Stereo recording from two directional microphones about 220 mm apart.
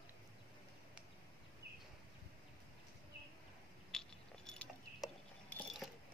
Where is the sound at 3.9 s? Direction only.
Centre (ahead or behind).